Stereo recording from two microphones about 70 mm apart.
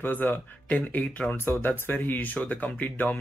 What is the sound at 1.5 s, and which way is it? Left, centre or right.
Speech, left.